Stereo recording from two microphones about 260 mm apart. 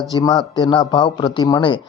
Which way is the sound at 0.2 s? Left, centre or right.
Centre.